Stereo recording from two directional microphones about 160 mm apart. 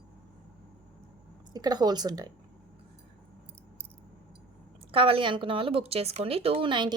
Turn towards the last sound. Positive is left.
turn(degrees=-30)  # may be behind; listen again after turning